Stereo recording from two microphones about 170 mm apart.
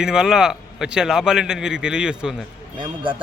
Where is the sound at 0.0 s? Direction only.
5° right (ahead or behind).